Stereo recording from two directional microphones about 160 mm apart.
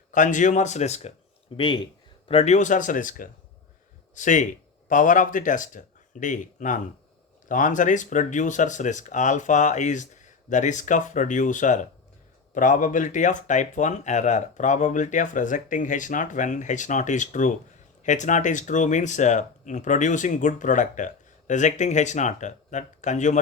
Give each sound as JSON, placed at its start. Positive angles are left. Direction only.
{"t": 0.1, "sound": "speech", "side_deg": 50}
{"t": 1.5, "sound": "speech", "side_deg": 30}